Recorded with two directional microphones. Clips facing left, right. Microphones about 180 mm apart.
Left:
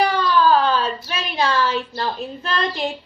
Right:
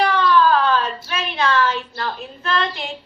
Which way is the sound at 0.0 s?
35° left (ahead or behind).